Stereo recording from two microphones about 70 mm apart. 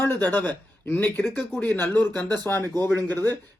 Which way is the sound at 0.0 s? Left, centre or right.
Left.